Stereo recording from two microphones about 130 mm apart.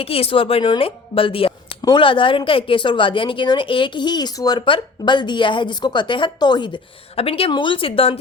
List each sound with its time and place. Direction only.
0.0 s a woman's voice: 45° left (ahead or behind)